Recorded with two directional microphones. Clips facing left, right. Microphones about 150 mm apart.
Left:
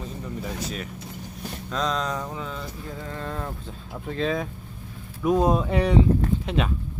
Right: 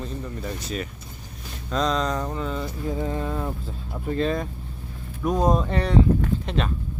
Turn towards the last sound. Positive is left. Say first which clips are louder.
# left 1 dB
turn(degrees=5)  # may be behind; listen again after turning